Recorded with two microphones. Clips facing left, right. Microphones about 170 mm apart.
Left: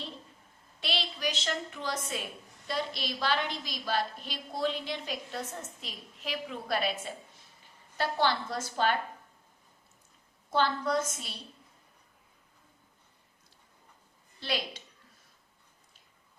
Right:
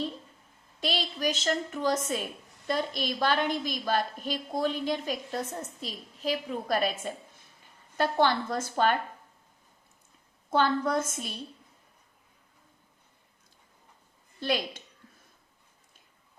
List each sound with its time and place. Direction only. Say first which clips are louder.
0.8 s a woman's voice: right 4 dB; 45° right (ahead or behind)
10.5 s a woman's voice: right 3 dB; 50° right (ahead or behind)
14.3 s a woman's voice: right 5 dB; 50° right (ahead or behind)